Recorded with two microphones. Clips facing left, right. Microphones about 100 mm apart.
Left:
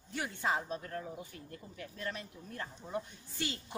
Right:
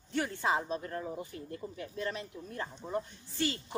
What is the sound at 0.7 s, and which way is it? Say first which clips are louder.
Speech: right 4 dB; 25° right (ahead or behind).